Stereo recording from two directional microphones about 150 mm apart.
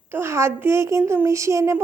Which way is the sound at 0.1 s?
15° right (ahead or behind).